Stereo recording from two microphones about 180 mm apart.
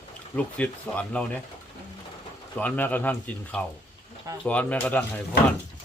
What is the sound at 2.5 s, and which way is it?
A man's voice, 10° left (ahead or behind).